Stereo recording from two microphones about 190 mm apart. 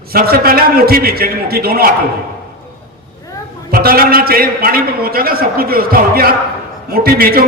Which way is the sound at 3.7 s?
50° right (ahead or behind).